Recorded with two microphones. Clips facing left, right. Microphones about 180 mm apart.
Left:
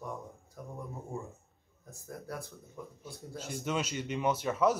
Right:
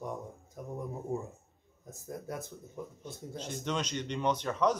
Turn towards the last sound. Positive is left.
turn(degrees=5)  # may be behind; listen again after turning